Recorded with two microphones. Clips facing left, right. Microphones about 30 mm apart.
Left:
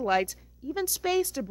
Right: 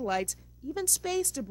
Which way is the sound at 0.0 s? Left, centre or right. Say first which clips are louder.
Left 5 dB; left.